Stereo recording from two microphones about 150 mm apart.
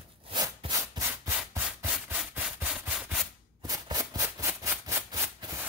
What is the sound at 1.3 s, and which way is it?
Rub, 10° right (ahead or behind).